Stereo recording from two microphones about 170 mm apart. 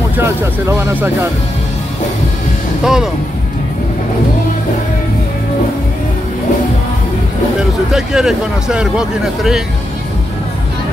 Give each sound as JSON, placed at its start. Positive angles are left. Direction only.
{"t": 0.2, "sound": "speech", "side_deg": -15}
{"t": 2.8, "sound": "speech", "side_deg": 0}
{"t": 7.9, "sound": "speech", "side_deg": -5}